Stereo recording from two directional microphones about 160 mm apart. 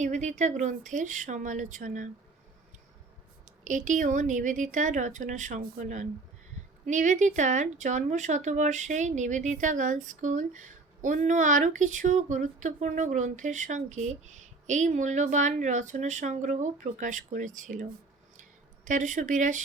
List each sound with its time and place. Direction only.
0.0 s speech: 50° right (ahead or behind)
3.4 s speech: 55° right (ahead or behind)
18.9 s speech: 50° right (ahead or behind)